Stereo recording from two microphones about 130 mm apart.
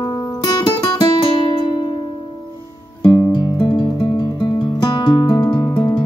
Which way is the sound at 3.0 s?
35° left (ahead or behind).